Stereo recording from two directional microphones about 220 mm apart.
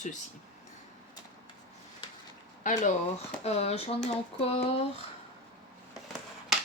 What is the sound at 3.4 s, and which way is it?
Speech, 30° left (ahead or behind).